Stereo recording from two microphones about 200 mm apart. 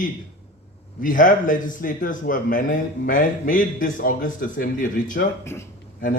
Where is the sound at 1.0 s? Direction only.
40° left (ahead or behind).